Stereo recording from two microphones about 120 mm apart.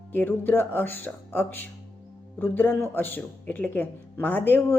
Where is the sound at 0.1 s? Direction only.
15° left (ahead or behind).